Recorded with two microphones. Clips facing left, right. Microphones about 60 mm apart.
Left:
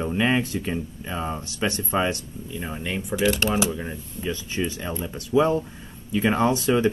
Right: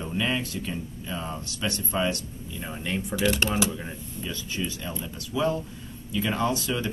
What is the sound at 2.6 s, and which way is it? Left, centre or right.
Speech, centre.